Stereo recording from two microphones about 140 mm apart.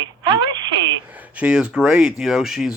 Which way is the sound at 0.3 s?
30° right (ahead or behind).